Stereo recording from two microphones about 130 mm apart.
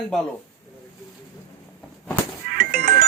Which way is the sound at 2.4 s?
90° right.